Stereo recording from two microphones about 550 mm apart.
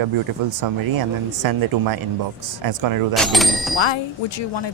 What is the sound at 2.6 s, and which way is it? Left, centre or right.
Speech, right.